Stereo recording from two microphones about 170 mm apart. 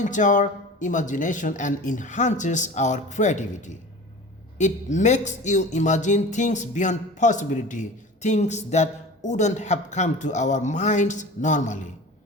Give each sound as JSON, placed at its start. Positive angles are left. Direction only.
{"t": 0.0, "sound": "speech", "side_deg": 50}